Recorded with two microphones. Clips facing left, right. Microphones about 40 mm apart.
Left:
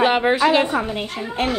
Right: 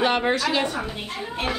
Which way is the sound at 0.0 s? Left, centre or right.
Centre.